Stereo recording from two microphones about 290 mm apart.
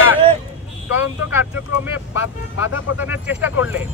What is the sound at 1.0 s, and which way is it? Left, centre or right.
Speech, centre.